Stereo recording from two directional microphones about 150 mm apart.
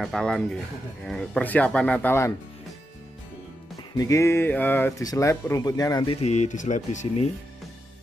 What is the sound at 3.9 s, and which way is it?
Speech, 20° left (ahead or behind).